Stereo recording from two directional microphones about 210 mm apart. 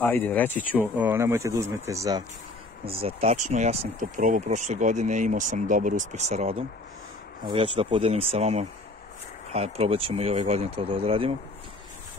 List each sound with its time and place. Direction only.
0.0 s speech: 10° left (ahead or behind)
0.7 s speech: 10° right (ahead or behind)
2.8 s speech: 25° right (ahead or behind)